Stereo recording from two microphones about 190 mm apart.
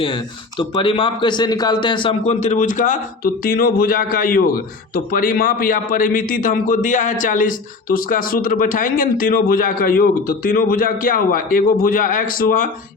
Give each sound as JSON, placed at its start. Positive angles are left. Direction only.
{"t": 0.7, "sound": "a man's voice", "side_deg": 30}